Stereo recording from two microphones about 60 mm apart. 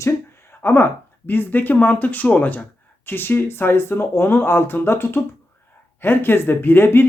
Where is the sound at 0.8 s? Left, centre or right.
Left.